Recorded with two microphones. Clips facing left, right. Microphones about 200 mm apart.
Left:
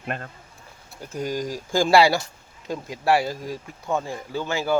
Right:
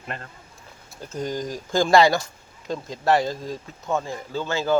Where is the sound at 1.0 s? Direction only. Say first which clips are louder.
Left 1 dB; 15° left (ahead or behind).